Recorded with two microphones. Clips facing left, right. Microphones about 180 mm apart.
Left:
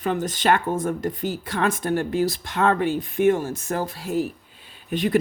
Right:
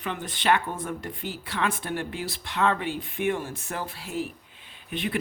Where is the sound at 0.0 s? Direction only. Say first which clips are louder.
Left 6 dB; 40° left (ahead or behind).